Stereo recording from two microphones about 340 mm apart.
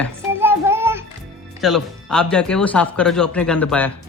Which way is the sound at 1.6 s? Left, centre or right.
Centre.